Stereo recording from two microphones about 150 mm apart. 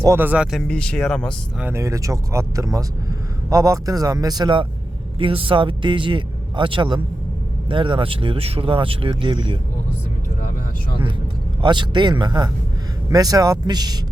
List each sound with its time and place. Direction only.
0.0 s speech: 15° right (ahead or behind)
0.5 s speech: 5° left (ahead or behind)
1.6 s speech: 20° right (ahead or behind); by 9.6 s 35° right (ahead or behind)
11.6 s speech: 30° right (ahead or behind)